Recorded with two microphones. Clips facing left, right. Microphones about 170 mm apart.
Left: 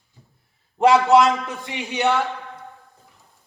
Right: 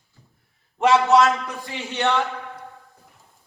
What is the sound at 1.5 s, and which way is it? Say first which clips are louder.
Speech: left 2 dB; 20° left (ahead or behind).